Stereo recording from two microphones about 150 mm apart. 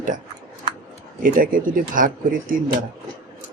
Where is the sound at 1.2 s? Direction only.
65° right (ahead or behind).